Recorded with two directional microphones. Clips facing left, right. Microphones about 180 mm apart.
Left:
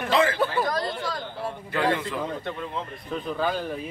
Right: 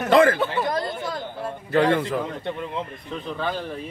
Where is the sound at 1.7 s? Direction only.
45° right (ahead or behind).